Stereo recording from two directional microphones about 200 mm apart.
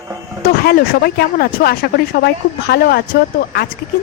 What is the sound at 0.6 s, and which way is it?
Speech, 50° left (ahead or behind).